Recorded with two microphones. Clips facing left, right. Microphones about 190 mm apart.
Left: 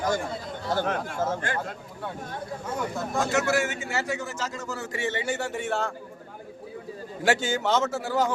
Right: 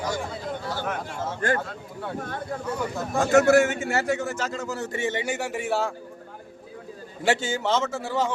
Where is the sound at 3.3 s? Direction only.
50° right (ahead or behind).